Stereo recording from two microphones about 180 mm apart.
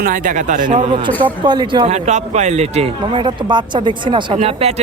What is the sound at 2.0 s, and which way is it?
Speech, 40° right (ahead or behind).